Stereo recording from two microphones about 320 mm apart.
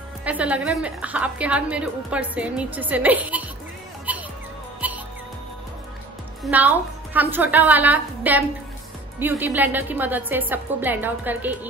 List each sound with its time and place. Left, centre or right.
0.2 s a woman's voice: centre
4.1 s music: centre
6.4 s a woman's voice: centre